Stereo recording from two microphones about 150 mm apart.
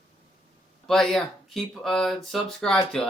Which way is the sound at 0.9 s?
Centre (ahead or behind).